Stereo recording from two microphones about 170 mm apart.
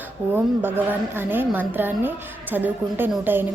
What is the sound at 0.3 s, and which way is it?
A woman's voice, 10° right (ahead or behind).